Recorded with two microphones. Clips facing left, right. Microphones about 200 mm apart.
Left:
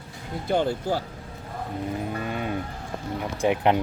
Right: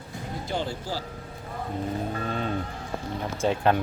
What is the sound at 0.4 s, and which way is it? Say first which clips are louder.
Speech: left 8 dB; 55° left (ahead or behind).